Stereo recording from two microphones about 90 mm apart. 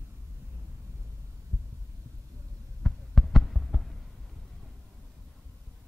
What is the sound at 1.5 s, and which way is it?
Heart sounds, 30° right (ahead or behind).